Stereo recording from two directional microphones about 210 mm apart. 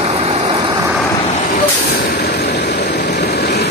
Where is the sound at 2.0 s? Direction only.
50° left (ahead or behind).